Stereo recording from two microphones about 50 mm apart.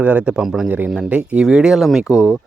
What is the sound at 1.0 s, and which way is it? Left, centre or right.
Speech, right.